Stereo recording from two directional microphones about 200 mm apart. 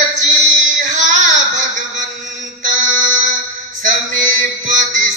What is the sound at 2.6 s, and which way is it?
Mantra, 40° right (ahead or behind).